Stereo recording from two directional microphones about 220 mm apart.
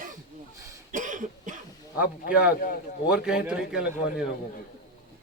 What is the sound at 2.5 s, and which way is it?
Speech, 40° left (ahead or behind).